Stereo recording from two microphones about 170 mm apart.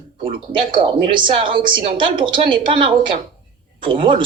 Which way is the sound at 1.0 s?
30° right (ahead or behind).